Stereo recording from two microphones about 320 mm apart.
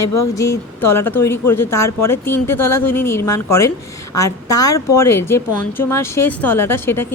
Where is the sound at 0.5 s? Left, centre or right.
Centre.